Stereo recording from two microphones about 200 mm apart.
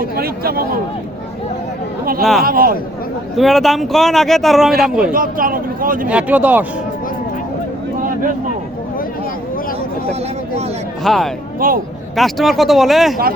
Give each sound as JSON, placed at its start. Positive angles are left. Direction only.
{"t": 0.2, "sound": "speech", "side_deg": -50}
{"t": 2.4, "sound": "speech", "side_deg": -45}
{"t": 3.3, "sound": "speech", "side_deg": 0}
{"t": 5.1, "sound": "speech", "side_deg": -45}
{"t": 6.1, "sound": "speech", "side_deg": -5}
{"t": 11.0, "sound": "speech", "side_deg": 0}
{"t": 11.6, "sound": "speech", "side_deg": -45}
{"t": 12.1, "sound": "speech", "side_deg": 0}